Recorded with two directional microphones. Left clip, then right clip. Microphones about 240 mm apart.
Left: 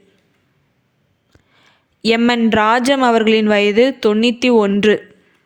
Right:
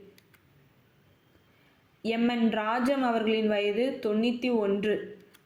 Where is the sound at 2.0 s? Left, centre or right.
Left.